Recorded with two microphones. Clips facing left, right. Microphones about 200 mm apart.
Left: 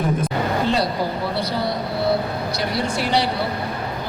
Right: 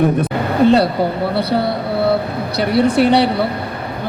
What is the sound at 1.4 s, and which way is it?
A man's voice, 60° right (ahead or behind).